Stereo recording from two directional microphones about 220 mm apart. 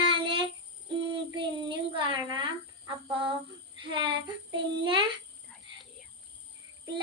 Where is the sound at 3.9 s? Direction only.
20° right (ahead or behind).